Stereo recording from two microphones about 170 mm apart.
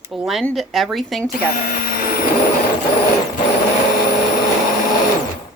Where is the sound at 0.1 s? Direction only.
Centre (ahead or behind).